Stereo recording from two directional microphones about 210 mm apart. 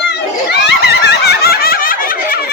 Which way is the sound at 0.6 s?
50° left (ahead or behind).